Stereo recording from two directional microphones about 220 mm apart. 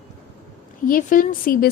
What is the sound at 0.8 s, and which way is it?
Speech, 35° left (ahead or behind).